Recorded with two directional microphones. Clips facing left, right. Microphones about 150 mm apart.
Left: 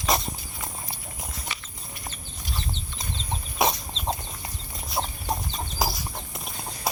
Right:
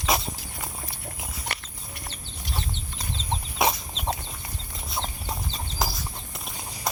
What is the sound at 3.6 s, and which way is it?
Chicken, centre (ahead or behind).